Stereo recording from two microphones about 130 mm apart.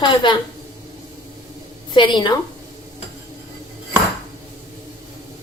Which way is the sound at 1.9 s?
35° left (ahead or behind).